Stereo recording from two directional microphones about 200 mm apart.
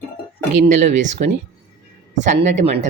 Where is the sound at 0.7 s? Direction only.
35° right (ahead or behind).